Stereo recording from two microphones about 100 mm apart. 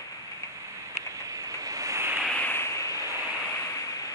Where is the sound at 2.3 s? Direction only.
20° left (ahead or behind).